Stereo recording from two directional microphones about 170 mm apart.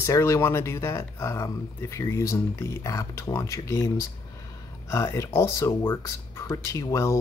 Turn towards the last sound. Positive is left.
turn(degrees=15)  # may be behind; listen again after turning